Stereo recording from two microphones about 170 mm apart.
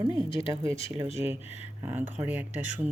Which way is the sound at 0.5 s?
20° right (ahead or behind).